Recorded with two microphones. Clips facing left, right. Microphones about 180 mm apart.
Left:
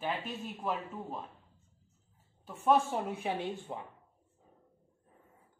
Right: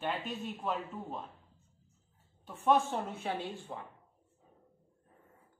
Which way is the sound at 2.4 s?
5° left (ahead or behind).